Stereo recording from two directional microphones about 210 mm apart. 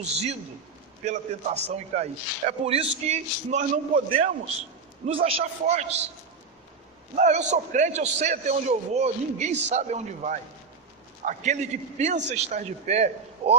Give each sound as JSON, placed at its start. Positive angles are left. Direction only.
{"t": 0.0, "sound": "a man's voice", "side_deg": -30}
{"t": 7.2, "sound": "a man's voice", "side_deg": -35}